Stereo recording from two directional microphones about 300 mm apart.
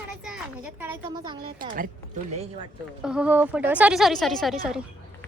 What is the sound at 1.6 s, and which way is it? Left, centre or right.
Speech, right.